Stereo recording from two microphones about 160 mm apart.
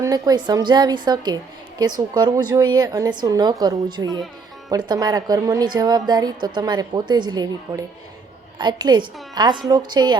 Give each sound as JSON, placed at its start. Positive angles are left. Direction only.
{"t": 0.0, "sound": "a woman's voice", "side_deg": -25}